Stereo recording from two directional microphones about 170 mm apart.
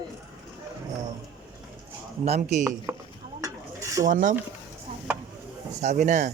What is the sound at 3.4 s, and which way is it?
Mechanisms, 20° right (ahead or behind).